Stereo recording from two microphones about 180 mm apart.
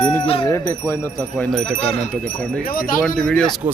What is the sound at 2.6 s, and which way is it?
Speech, 50° left (ahead or behind).